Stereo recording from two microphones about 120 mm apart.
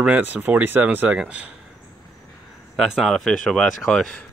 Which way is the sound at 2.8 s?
Centre (ahead or behind).